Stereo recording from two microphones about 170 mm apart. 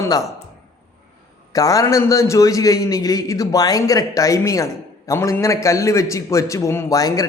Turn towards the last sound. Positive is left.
turn(degrees=20)  # may be behind; listen again after turning